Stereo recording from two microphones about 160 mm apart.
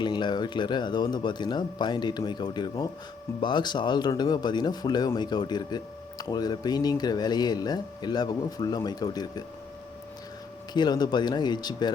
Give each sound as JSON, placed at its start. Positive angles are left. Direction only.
{"t": 0.0, "sound": "speech", "side_deg": 30}
{"t": 10.8, "sound": "speech", "side_deg": 25}